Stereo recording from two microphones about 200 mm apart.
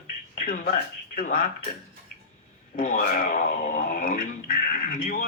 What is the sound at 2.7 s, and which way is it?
Speech, 45° left (ahead or behind).